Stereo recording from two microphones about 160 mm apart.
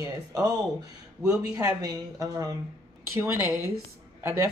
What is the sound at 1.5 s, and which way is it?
Speech, 20° right (ahead or behind).